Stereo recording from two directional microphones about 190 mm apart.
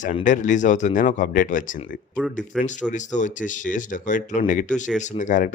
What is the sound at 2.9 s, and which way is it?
Speech, 40° left (ahead or behind).